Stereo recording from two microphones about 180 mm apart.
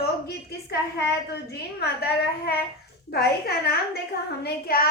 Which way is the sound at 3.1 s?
60° left (ahead or behind).